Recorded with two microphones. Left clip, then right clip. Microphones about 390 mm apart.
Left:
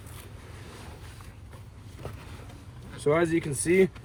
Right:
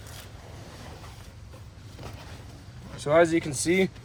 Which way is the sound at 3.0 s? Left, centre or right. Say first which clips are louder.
Right 4 dB; centre.